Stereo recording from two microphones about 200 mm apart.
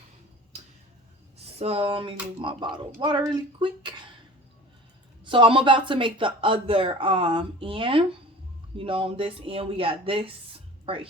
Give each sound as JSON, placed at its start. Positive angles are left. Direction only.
{"t": 1.5, "sound": "speech", "side_deg": -30}
{"t": 5.2, "sound": "speech", "side_deg": -25}